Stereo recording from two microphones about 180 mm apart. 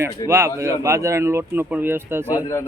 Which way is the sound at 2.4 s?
15° left (ahead or behind).